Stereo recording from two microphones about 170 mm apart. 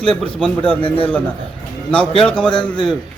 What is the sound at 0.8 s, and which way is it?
Speech, 30° left (ahead or behind).